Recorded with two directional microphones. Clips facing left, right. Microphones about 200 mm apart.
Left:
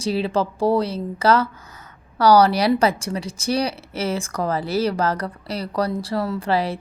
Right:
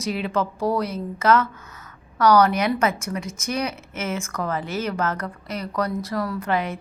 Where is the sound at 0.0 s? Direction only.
30° left (ahead or behind).